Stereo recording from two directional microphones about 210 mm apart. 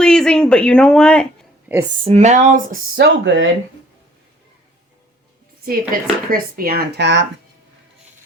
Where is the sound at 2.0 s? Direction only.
30° right (ahead or behind); by 3.5 s 60° right (ahead or behind).